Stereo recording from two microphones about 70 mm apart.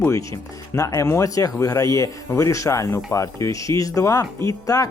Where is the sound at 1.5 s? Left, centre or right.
Left.